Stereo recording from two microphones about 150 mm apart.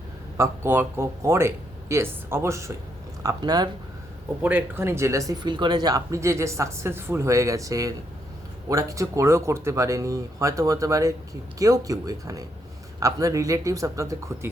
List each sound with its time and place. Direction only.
0.3 s speech: 20° right (ahead or behind)
4.4 s speech: 15° right (ahead or behind)